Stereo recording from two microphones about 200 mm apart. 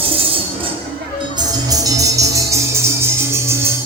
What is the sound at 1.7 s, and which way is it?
Music, 20° right (ahead or behind).